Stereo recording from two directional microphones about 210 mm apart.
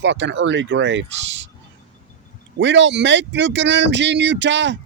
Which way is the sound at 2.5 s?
60° right (ahead or behind).